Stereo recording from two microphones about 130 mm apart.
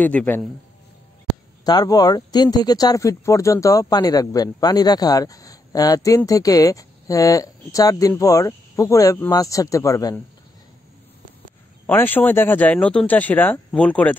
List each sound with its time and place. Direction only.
0.0 s speech: 15° left (ahead or behind)
1.6 s speech: 30° left (ahead or behind)
11.8 s speech: 15° left (ahead or behind)